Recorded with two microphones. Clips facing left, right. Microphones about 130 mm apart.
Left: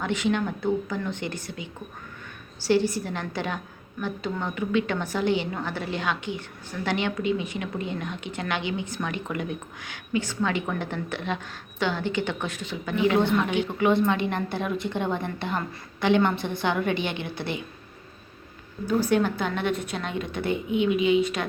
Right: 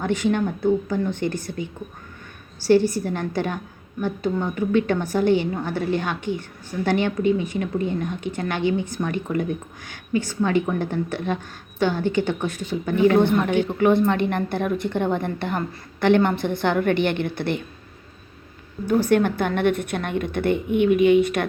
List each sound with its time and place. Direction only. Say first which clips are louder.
0.0 s a woman's voice: right 4 dB; 45° right (ahead or behind)
2.6 s a woman's voice: right 5 dB; 45° right (ahead or behind)
19.0 s a woman's voice: right 4 dB; 55° right (ahead or behind)